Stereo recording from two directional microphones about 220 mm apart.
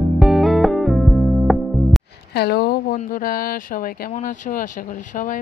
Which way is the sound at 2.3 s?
45° left (ahead or behind).